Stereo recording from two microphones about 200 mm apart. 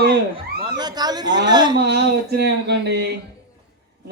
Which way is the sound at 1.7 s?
55° right (ahead or behind).